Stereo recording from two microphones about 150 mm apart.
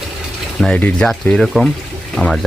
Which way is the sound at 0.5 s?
5° left (ahead or behind).